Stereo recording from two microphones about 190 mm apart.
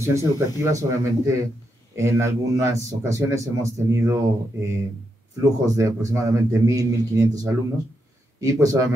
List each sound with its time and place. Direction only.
0.0 s speech: 15° right (ahead or behind)